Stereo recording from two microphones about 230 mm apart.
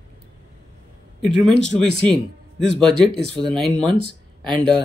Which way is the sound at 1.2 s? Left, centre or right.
Centre.